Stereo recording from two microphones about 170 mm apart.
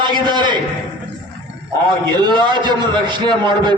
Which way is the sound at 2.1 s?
25° right (ahead or behind).